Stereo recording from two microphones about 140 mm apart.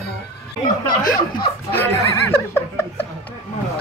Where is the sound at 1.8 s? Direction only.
15° left (ahead or behind).